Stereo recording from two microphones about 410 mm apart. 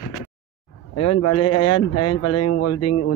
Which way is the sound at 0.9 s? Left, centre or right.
Left.